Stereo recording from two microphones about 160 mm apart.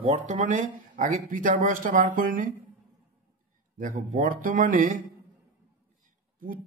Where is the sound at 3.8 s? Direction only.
55° right (ahead or behind).